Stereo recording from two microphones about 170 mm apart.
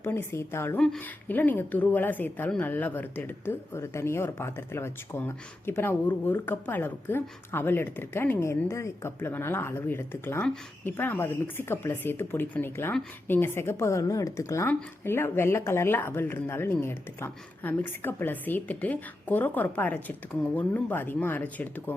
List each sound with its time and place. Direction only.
0.0 s speech: 15° left (ahead or behind)